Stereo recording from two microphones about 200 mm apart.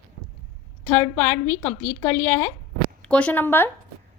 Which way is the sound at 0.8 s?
10° left (ahead or behind).